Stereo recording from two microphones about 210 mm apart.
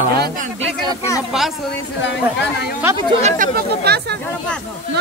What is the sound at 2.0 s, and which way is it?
Speech, 55° left (ahead or behind).